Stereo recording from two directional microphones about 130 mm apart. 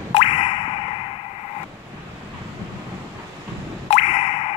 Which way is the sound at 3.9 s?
55° left (ahead or behind).